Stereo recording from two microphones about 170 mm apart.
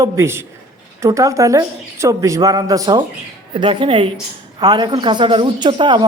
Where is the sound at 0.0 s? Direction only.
15° right (ahead or behind).